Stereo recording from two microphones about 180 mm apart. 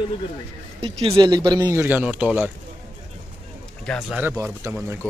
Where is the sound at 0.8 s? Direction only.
30° right (ahead or behind); by 2.5 s 10° right (ahead or behind).